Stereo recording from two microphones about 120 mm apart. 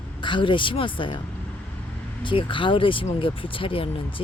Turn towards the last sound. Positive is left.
turn(degrees=50)  # may be behind; listen again after turning